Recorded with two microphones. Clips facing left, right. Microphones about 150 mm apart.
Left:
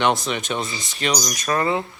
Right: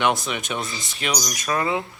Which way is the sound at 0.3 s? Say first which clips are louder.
Left 3 dB; 5° right (ahead or behind).